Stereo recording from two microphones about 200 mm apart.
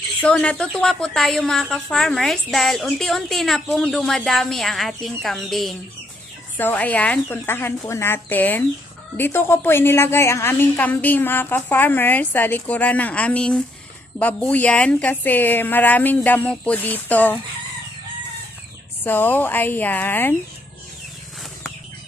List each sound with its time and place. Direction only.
0.2 s a woman's voice: 5° left (ahead or behind)
19.0 s a woman's voice: 10° left (ahead or behind)